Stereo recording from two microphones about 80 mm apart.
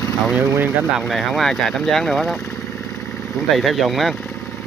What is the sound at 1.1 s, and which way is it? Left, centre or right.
Speech, centre.